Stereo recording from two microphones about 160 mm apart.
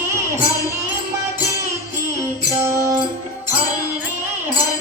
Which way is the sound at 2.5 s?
20° right (ahead or behind).